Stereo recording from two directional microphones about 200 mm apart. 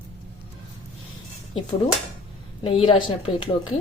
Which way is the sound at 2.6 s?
25° left (ahead or behind).